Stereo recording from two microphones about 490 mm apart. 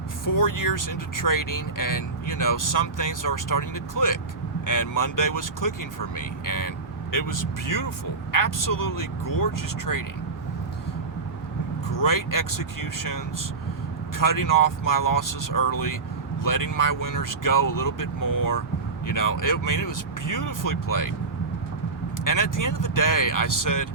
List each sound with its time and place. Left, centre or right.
0.3 s speech: left
11.9 s speech: left
22.2 s speech: left